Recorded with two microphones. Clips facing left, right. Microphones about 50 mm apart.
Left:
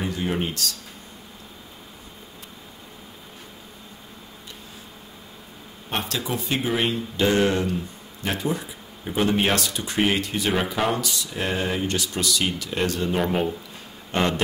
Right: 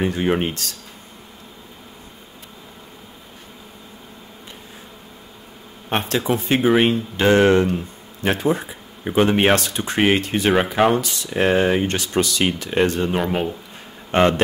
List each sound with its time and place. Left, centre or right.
0.0 s speech: right
5.9 s speech: right
13.1 s speech: centre
14.1 s speech: right